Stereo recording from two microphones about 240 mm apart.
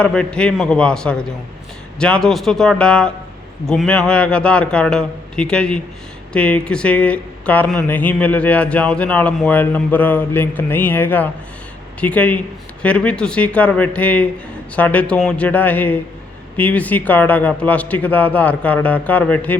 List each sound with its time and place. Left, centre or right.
0.0 s a man's voice: centre